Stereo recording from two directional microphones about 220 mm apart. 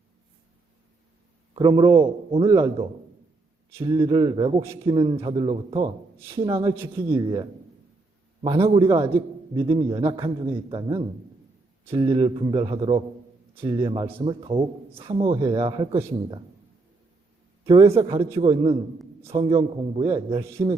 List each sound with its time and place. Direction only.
1.5 s a man's voice: 20° right (ahead or behind)
3.7 s a man's voice: 15° right (ahead or behind)
6.1 s a man's voice: 10° right (ahead or behind)
17.7 s a man's voice: 25° right (ahead or behind)